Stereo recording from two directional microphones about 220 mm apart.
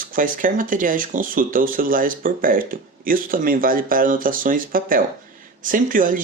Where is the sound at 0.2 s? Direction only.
40° right (ahead or behind).